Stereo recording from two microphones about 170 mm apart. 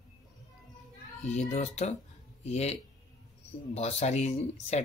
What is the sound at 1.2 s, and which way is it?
Speech, 40° left (ahead or behind).